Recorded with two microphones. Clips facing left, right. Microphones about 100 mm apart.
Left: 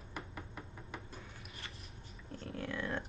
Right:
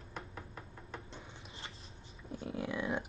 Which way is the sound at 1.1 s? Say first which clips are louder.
Right 1 dB; 25° right (ahead or behind).